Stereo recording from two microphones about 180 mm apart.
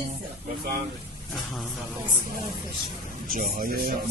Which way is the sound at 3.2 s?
50° right (ahead or behind).